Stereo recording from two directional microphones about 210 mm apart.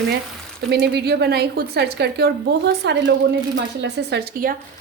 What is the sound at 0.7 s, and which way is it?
A woman's voice, 50° right (ahead or behind).